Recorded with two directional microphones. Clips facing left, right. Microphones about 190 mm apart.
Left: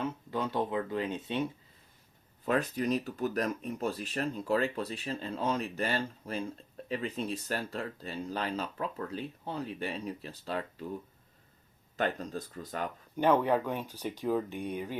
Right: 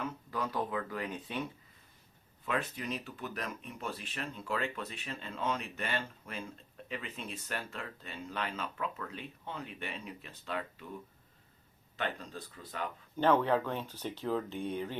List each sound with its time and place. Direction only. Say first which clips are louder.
0.0 s speech: left 4 dB; 25° left (ahead or behind)
2.4 s speech: left 6 dB; 40° left (ahead or behind)
11.9 s speech: left 6 dB; 45° left (ahead or behind)
13.1 s speech: left 2 dB; 15° left (ahead or behind)